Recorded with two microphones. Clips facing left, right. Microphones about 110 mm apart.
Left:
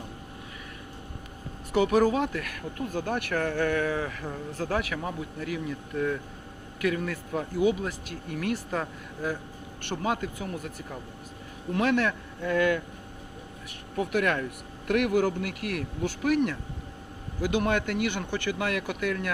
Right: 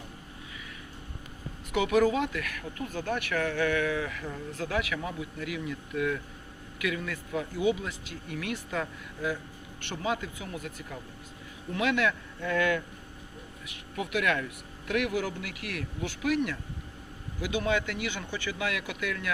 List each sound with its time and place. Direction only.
1.7 s speech: 35° left (ahead or behind)
6.7 s speech: 40° left (ahead or behind)
11.7 s speech: 40° left (ahead or behind)
13.7 s speech: 40° left (ahead or behind)